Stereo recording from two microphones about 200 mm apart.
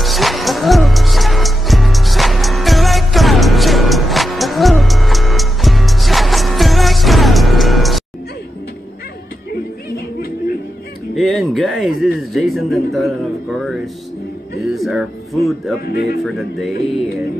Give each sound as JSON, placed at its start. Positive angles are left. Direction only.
{"t": 0.0, "sound": "music", "side_deg": 0}
{"t": 11.1, "sound": "a man's voice", "side_deg": 0}
{"t": 15.8, "sound": "speech", "side_deg": 55}
{"t": 16.3, "sound": "speech", "side_deg": 0}